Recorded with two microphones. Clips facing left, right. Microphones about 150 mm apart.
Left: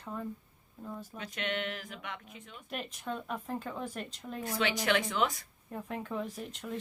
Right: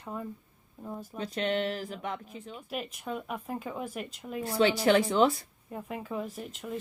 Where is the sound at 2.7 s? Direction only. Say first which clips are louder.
Right 2 dB; 5° right (ahead or behind).